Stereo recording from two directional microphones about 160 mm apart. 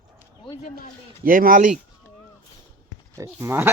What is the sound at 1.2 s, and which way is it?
Speech, 60° right (ahead or behind).